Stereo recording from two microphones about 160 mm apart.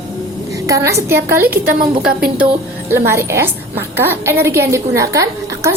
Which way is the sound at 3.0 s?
15° right (ahead or behind).